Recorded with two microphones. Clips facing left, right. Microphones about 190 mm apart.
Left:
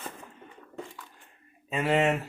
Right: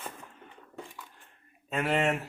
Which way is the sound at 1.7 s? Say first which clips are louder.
Left 3 dB; centre (ahead or behind).